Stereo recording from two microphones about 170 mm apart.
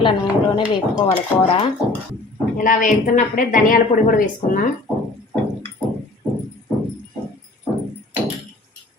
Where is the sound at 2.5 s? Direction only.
50° left (ahead or behind).